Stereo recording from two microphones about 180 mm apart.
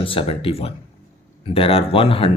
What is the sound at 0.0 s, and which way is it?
Speech, 30° left (ahead or behind).